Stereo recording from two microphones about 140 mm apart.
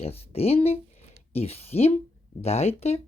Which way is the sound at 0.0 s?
45° left (ahead or behind).